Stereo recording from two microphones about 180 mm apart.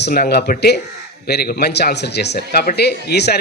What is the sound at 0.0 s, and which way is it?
A man's voice, 60° left (ahead or behind).